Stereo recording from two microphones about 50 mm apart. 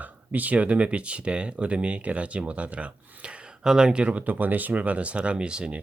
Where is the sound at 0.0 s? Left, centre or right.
Right.